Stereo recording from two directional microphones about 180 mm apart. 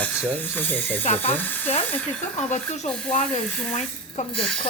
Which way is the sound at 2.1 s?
40° left (ahead or behind).